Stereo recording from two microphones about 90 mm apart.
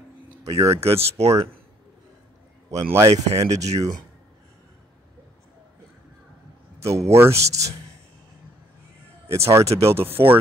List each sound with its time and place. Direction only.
0.4 s speech: 35° right (ahead or behind)
2.7 s speech: 35° right (ahead or behind)
6.8 s speech: 35° right (ahead or behind)
9.3 s speech: 35° right (ahead or behind)